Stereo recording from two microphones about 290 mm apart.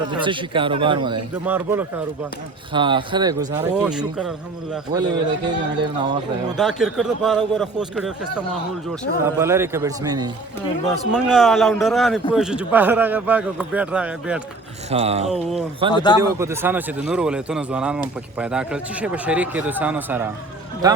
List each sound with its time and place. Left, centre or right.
0.1 s speech: centre
4.9 s speech: centre
6.6 s speech: centre
10.8 s speech: centre
14.8 s a sound: right
15.3 s speech: centre
15.9 s a man's voice: centre
16.4 s speech: centre